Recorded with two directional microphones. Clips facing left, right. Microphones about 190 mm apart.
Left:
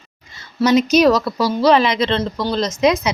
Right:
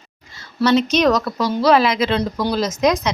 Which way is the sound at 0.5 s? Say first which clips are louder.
Left 2 dB; 10° left (ahead or behind).